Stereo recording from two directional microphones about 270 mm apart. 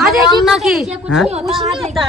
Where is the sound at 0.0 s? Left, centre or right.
Centre.